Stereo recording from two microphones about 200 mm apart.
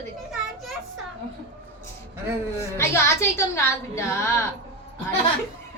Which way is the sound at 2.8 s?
15° left (ahead or behind).